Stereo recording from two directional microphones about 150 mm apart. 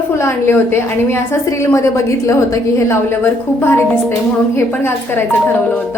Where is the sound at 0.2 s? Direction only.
15° left (ahead or behind).